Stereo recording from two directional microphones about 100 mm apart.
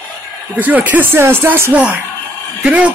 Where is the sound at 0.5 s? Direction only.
15° right (ahead or behind).